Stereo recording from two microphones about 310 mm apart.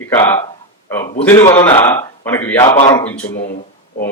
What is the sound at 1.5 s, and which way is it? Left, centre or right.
Speech, centre.